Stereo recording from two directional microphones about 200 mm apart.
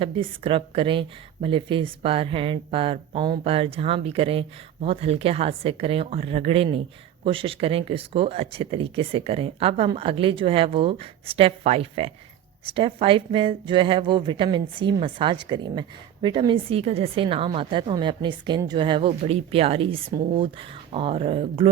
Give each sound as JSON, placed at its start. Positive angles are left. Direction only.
{"t": 0.0, "sound": "speech", "side_deg": -25}